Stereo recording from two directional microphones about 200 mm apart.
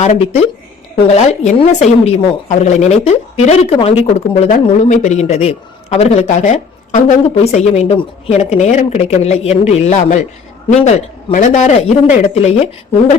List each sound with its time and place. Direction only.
0.0 s a man's voice: 35° left (ahead or behind)